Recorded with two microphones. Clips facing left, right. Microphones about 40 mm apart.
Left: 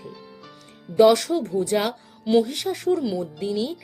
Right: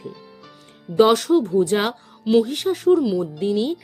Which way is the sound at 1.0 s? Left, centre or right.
Right.